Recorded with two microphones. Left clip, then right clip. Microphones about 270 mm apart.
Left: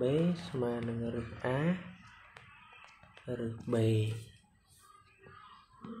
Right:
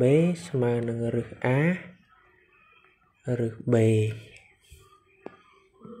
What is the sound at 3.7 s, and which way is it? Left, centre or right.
Speech, right.